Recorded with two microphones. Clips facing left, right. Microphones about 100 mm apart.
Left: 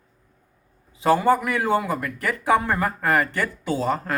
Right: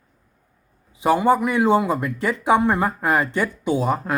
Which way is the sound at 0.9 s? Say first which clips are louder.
Right 1 dB; 20° right (ahead or behind).